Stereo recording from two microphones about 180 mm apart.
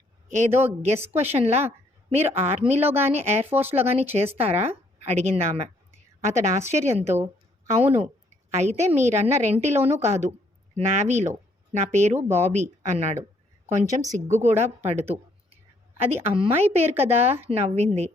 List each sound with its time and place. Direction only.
0.3 s a woman's voice: 40° right (ahead or behind)
3.5 s speech: 10° right (ahead or behind)
3.8 s a woman's voice: 35° right (ahead or behind)
14.3 s a woman's voice: 40° right (ahead or behind)